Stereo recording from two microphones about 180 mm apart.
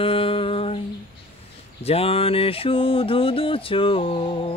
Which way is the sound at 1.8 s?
35° left (ahead or behind).